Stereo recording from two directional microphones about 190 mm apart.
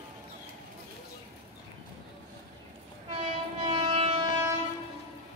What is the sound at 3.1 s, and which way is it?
Train, 30° right (ahead or behind).